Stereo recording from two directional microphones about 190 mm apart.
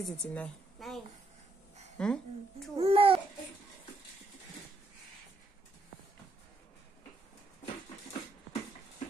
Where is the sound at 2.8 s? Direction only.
30° right (ahead or behind).